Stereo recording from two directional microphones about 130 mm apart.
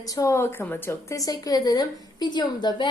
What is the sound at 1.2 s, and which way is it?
A woman's voice, 30° left (ahead or behind).